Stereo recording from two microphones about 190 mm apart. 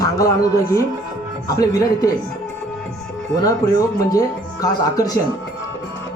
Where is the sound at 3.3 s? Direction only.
20° left (ahead or behind).